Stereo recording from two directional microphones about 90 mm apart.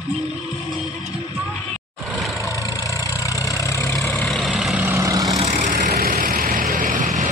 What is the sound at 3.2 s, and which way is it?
Vehicle, 35° left (ahead or behind).